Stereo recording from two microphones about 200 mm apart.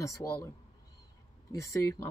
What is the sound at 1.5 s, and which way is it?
Speech, 15° left (ahead or behind).